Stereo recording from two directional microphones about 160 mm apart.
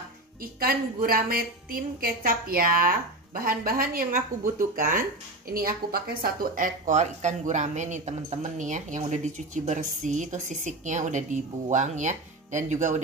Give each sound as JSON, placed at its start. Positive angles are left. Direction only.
{"t": 0.4, "sound": "a woman's voice", "side_deg": -65}